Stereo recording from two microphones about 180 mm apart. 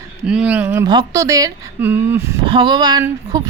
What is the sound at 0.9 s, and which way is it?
A woman's voice, 20° right (ahead or behind).